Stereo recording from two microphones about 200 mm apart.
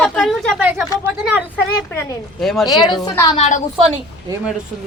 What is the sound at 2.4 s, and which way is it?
Speech, centre (ahead or behind).